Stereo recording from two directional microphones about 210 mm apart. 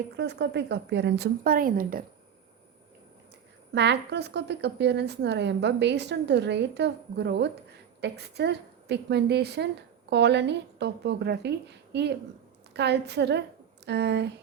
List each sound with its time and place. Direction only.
0.2 s a woman's voice: 55° right (ahead or behind)
3.8 s a woman's voice: 55° right (ahead or behind)